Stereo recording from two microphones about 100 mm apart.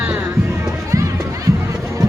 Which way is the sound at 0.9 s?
30° right (ahead or behind).